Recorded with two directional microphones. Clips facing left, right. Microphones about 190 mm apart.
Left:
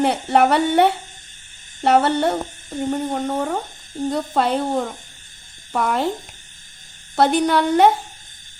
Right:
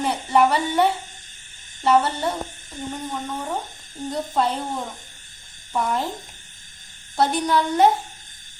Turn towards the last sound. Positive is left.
turn(degrees=70)  # may be behind; listen again after turning